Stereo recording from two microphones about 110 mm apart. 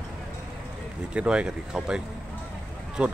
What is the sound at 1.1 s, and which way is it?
Speech, 10° right (ahead or behind).